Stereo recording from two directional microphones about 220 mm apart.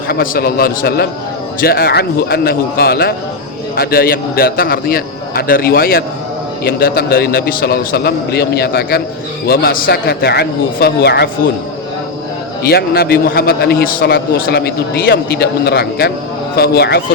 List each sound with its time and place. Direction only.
0.1 s a man's voice: 45° left (ahead or behind)
12.6 s a man's voice: 45° left (ahead or behind)